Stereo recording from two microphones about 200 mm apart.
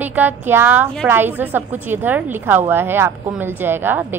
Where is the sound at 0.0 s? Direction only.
10° right (ahead or behind).